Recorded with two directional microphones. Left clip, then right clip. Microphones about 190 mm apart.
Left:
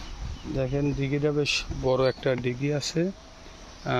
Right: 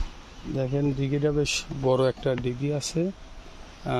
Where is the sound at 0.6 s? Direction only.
25° right (ahead or behind).